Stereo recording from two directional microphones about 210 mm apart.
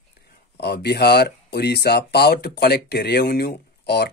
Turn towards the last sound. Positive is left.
turn(degrees=50)  # may be behind; listen again after turning